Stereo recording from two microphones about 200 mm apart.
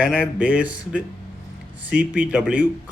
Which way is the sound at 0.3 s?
5° right (ahead or behind).